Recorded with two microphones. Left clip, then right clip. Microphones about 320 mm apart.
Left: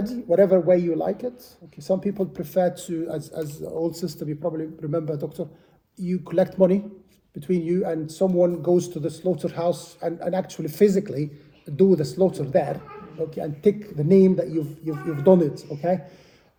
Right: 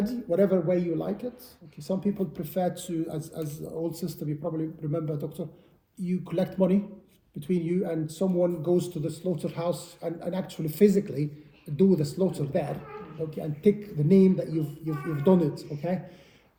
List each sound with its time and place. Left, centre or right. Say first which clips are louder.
0.0 s a man's voice: left 6 dB; centre